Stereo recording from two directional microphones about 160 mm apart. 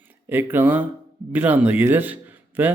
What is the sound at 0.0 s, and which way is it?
Speech, 10° right (ahead or behind).